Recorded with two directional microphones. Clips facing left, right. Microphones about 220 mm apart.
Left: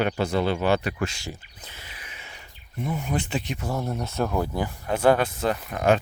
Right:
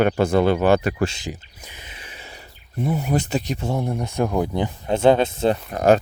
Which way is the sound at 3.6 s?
25° right (ahead or behind).